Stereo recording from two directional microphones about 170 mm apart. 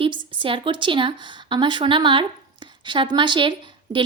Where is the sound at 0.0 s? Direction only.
30° right (ahead or behind).